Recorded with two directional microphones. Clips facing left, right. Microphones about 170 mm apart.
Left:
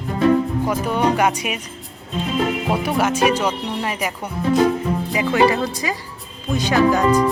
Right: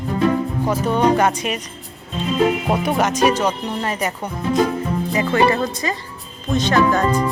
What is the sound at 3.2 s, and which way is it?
Speech, 10° left (ahead or behind).